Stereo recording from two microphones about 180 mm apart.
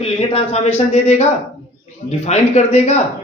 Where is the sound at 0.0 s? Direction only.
35° left (ahead or behind).